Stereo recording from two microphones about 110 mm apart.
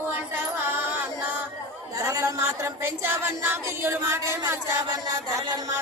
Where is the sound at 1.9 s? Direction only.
30° right (ahead or behind).